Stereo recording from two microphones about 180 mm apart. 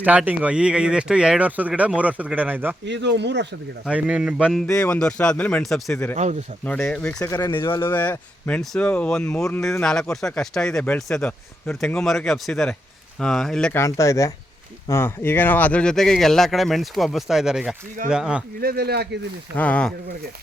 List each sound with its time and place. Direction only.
0.0 s speech: 10° right (ahead or behind)
2.8 s speech: 80° right
3.8 s speech: 5° right (ahead or behind)
4.6 s speech: 5° left (ahead or behind)
7.2 s speech: 20° left (ahead or behind)
13.8 s speech: 15° left (ahead or behind); by 18.4 s 5° right (ahead or behind)
18.6 s speech: 60° right (ahead or behind)
19.5 s speech: 5° left (ahead or behind)